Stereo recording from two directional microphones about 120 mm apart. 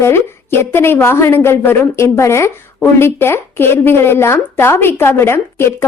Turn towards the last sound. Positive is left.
turn(degrees=20)  # may be behind; listen again after turning